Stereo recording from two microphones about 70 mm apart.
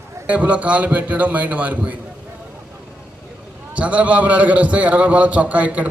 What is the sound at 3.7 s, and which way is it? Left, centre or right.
A man's voice, centre.